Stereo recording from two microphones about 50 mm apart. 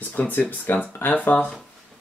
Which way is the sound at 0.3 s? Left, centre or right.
Left.